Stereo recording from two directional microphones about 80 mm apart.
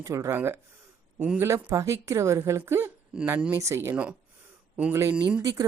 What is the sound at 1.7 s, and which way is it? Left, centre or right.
Speech, right.